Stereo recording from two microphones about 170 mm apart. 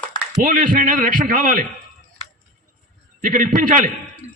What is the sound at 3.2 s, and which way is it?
Speech, 50° right (ahead or behind).